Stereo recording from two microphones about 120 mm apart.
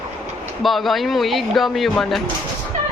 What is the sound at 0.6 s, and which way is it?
Speech, centre (ahead or behind).